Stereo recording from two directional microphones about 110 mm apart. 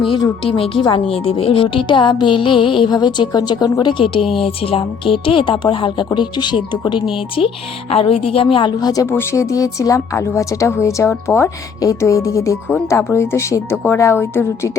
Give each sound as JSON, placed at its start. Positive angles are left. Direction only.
{"t": 0.5, "sound": "a woman's voice", "side_deg": 55}
{"t": 8.8, "sound": "a woman's voice", "side_deg": 35}
{"t": 9.0, "sound": "a woman's voice", "side_deg": 25}